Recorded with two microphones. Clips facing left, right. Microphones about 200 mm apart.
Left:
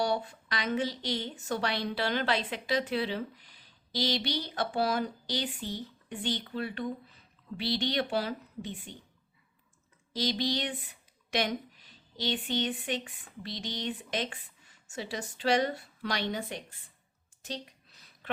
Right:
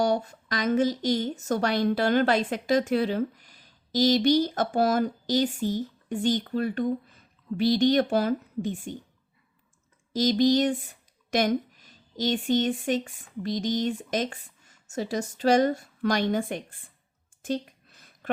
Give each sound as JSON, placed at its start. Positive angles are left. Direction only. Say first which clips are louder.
{"t": 0.0, "sound": "a woman's voice", "louder": "right 5 dB", "side_deg": -45}
{"t": 10.1, "sound": "speech", "louder": "right 10 dB", "side_deg": -45}
{"t": 17.4, "sound": "a sound", "louder": "right 11 dB", "side_deg": -50}